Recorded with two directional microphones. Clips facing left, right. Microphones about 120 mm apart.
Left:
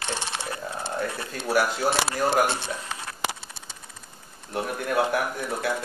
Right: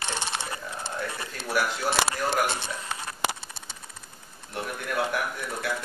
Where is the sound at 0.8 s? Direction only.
30° left (ahead or behind).